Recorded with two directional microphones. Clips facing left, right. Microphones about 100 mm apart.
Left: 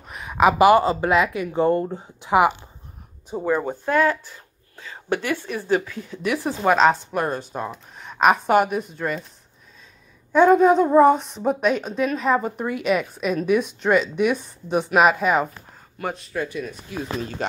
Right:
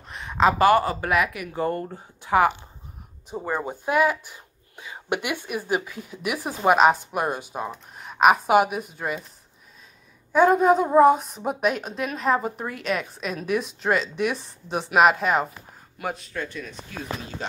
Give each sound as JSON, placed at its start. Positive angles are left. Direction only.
{"t": 0.1, "sound": "speech", "side_deg": 5}
{"t": 3.3, "sound": "speech", "side_deg": 0}
{"t": 10.3, "sound": "a woman's voice", "side_deg": -5}
{"t": 16.3, "sound": "speech", "side_deg": 10}
{"t": 17.4, "sound": "speech", "side_deg": 60}